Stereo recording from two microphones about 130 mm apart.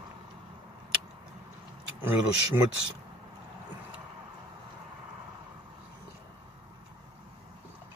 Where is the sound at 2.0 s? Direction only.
15° right (ahead or behind).